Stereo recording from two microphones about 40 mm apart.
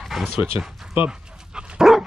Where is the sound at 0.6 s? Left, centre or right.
Centre.